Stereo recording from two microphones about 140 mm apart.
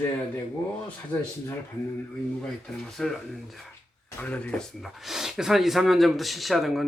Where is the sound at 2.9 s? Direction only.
5° left (ahead or behind).